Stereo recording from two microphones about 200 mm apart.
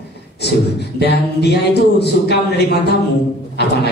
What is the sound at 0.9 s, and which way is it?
A man's voice, 55° left (ahead or behind).